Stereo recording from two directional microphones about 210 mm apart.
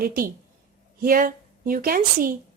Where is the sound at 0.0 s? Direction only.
45° right (ahead or behind).